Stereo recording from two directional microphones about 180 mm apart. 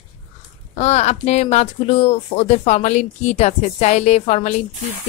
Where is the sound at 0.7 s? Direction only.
40° left (ahead or behind).